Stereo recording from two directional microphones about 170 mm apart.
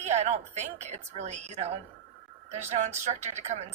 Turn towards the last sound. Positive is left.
turn(degrees=-40)  # may be behind; listen again after turning